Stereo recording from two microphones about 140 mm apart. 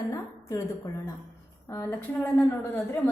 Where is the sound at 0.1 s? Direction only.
20° left (ahead or behind).